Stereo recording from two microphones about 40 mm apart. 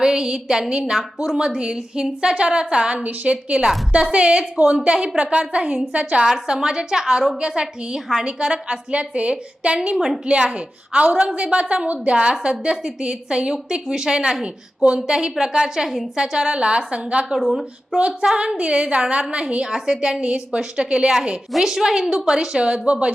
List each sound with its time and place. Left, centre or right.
0.0 s a woman's voice: centre; by 6.2 s right
6.6 s a woman's voice: centre
17.4 s speech: centre
17.9 s a woman's voice: right
19.6 s a woman's voice: centre
20.2 s a woman's voice: right